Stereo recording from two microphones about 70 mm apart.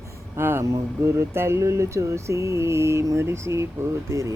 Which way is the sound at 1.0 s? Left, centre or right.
Right.